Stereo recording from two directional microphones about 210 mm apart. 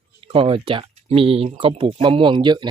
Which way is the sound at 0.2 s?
25° right (ahead or behind).